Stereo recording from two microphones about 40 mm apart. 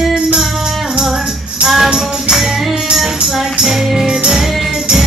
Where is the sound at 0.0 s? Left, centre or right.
Centre.